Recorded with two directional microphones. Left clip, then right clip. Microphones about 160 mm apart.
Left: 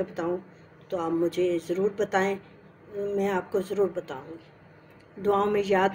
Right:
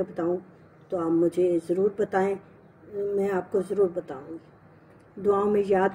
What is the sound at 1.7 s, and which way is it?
Speech, 40° right (ahead or behind).